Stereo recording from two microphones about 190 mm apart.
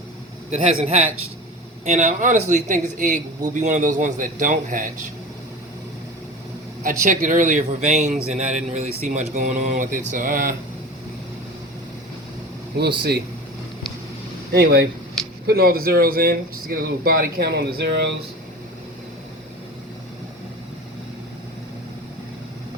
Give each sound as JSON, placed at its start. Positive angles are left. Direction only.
{"t": 0.5, "sound": "a man's voice", "side_deg": -35}
{"t": 7.0, "sound": "a man's voice", "side_deg": -45}
{"t": 12.7, "sound": "speech", "side_deg": -60}
{"t": 14.5, "sound": "speech", "side_deg": -55}